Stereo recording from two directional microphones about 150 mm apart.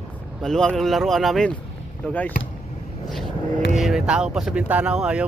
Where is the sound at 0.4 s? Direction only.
5° left (ahead or behind).